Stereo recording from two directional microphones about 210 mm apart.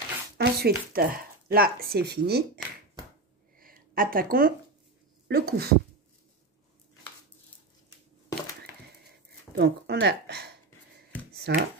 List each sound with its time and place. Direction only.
0.4 s speech: 50° right (ahead or behind)
3.5 s a sound: 40° right (ahead or behind)
5.3 s speech: 50° right (ahead or behind)
9.6 s speech: 50° right (ahead or behind)